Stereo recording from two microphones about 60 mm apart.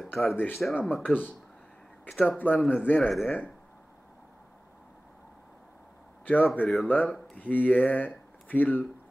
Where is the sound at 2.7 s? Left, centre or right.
Left.